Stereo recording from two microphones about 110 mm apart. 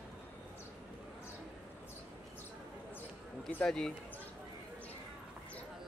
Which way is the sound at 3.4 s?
5° left (ahead or behind).